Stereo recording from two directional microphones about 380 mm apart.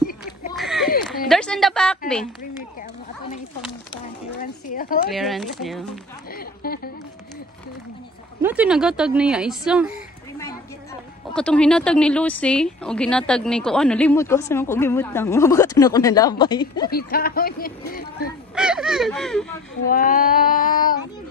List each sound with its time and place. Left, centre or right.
0.6 s a sound: centre
3.9 s speech: left
5.1 s speech: centre
6.3 s a sound: left
8.4 s speech: centre
11.3 s speech: centre
16.9 s speech: left
18.5 s a sound: centre
19.9 s speech: left